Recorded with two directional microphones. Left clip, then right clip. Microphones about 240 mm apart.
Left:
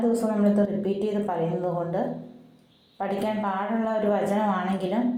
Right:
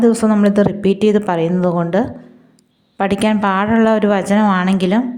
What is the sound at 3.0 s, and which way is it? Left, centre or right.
Speech, right.